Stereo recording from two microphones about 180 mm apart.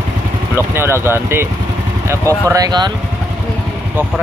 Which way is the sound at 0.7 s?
15° right (ahead or behind).